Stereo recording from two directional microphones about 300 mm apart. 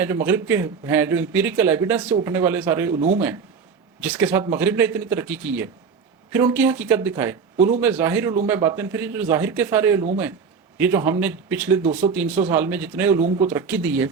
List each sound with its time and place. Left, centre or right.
0.0 s speech: centre
2.9 s speech: right
4.0 s speech: centre